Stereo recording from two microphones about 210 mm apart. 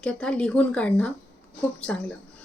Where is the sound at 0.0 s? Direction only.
5° left (ahead or behind).